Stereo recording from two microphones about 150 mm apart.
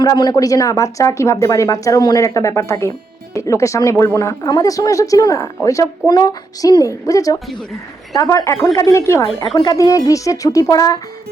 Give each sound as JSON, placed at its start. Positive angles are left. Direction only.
{"t": 0.0, "sound": "speech", "side_deg": 25}